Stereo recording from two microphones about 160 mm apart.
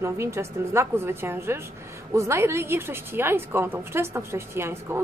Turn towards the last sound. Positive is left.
turn(degrees=-15)  # may be behind; listen again after turning